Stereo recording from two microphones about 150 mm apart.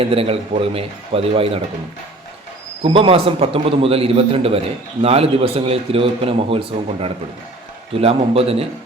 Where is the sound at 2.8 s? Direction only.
35° right (ahead or behind).